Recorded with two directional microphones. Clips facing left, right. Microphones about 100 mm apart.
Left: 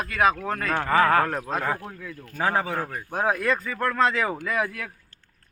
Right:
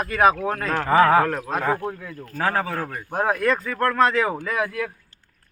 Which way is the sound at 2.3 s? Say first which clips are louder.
Right 1 dB; 10° left (ahead or behind).